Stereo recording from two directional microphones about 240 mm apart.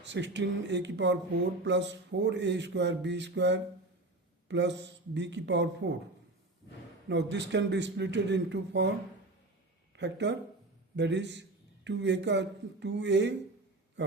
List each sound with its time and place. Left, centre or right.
0.0 s speech: right
7.1 s speech: right
9.9 s speech: right